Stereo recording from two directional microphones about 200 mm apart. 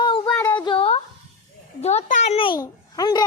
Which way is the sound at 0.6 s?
25° left (ahead or behind).